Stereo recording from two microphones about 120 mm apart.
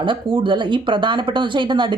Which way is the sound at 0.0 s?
45° right (ahead or behind).